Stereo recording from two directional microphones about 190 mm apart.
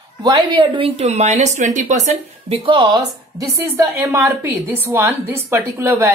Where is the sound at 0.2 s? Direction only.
25° right (ahead or behind).